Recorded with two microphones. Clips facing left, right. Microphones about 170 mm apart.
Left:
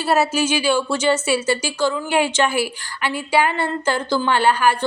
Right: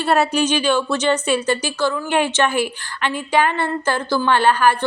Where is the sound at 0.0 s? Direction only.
5° left (ahead or behind).